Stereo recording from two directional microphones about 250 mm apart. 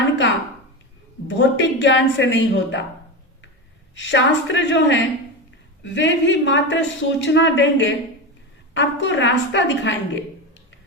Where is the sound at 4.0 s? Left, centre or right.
Left.